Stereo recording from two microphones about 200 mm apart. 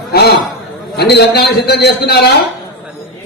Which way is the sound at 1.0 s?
55° left (ahead or behind).